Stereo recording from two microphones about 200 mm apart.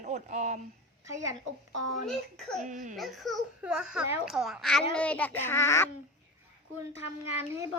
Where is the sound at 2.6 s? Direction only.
40° right (ahead or behind).